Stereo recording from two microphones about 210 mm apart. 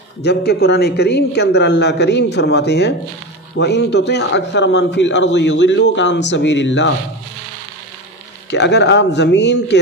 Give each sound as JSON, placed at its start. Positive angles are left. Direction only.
{"t": 0.2, "sound": "a man's voice", "side_deg": 50}
{"t": 8.5, "sound": "a man's voice", "side_deg": 55}